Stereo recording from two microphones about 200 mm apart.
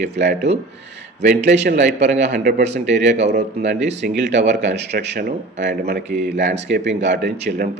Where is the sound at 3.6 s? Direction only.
60° right (ahead or behind).